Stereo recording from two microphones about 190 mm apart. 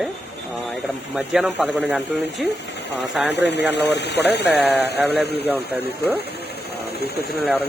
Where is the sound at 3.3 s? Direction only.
65° left (ahead or behind).